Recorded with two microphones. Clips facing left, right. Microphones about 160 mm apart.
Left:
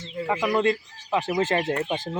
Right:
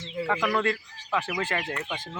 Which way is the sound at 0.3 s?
20° left (ahead or behind).